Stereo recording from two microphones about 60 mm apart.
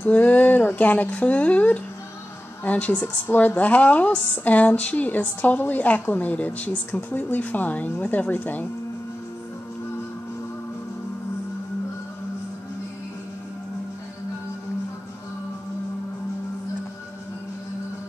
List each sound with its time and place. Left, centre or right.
0.0 s speech: left